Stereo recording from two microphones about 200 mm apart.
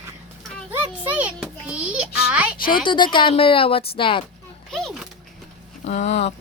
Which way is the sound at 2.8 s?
25° left (ahead or behind).